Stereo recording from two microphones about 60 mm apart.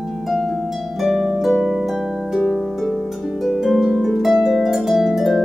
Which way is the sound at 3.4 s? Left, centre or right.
Centre.